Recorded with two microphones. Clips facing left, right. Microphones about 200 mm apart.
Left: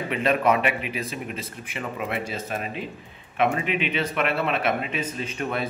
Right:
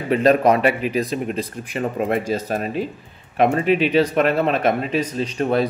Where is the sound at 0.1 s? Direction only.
40° right (ahead or behind).